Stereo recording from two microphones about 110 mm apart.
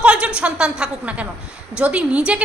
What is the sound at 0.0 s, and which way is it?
A woman's voice, 10° right (ahead or behind).